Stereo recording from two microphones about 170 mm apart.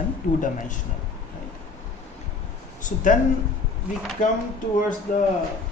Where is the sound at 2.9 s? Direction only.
50° left (ahead or behind).